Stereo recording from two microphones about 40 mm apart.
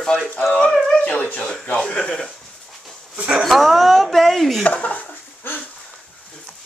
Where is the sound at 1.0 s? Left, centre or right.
Left.